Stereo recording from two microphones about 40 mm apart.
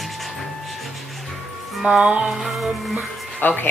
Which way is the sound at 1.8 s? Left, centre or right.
Centre.